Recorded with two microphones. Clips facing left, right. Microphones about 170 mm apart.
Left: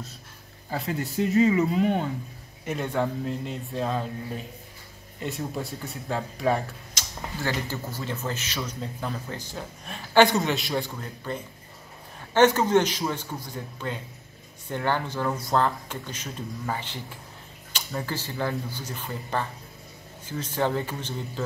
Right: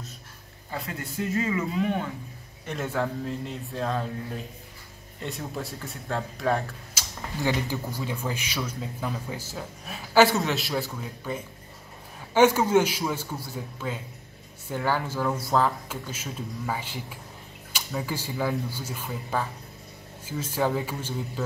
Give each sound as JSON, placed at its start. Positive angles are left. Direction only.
{"t": 0.7, "sound": "speech", "side_deg": 25}
{"t": 2.8, "sound": "a man's voice", "side_deg": 0}